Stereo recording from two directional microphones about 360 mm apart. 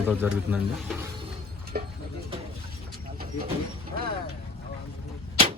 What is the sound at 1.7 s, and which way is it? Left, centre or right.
Speech, right.